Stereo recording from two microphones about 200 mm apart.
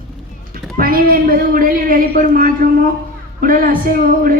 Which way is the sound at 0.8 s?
45° right (ahead or behind).